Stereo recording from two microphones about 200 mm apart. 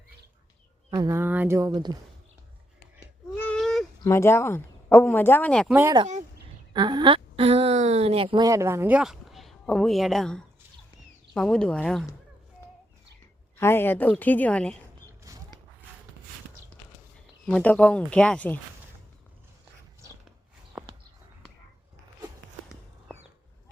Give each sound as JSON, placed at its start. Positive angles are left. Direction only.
{"t": 0.9, "sound": "speech", "side_deg": -20}
{"t": 3.3, "sound": "a sound", "side_deg": 5}
{"t": 4.0, "sound": "speech", "side_deg": 15}
{"t": 6.7, "sound": "speech", "side_deg": -20}
{"t": 13.6, "sound": "a woman's voice", "side_deg": 10}
{"t": 17.4, "sound": "speech", "side_deg": 5}
{"t": 20.7, "sound": "a sound", "side_deg": -5}